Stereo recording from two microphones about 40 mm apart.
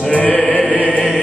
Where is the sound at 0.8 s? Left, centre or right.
Left.